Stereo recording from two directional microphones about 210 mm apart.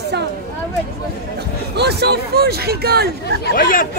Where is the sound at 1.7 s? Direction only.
50° right (ahead or behind).